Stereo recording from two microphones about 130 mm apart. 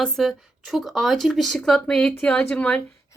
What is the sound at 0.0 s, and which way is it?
A woman's voice, centre (ahead or behind).